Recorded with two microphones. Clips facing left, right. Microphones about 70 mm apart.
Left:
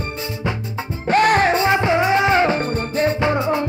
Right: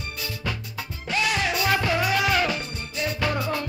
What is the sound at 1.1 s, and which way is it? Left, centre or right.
Music, left.